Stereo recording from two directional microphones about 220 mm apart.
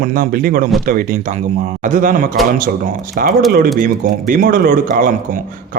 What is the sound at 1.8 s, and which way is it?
Speech, 35° right (ahead or behind).